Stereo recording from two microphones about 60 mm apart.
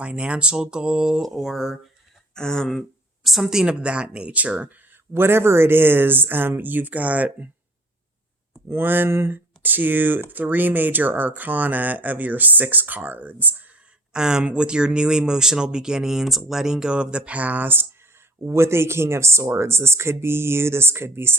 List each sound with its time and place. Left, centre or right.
0.0 s speech: centre
2.3 s speech: centre
3.2 s speech: centre; by 4.8 s right
5.1 s speech: right
8.7 s speech: right
14.1 s speech: centre; by 17.8 s right
18.4 s speech: right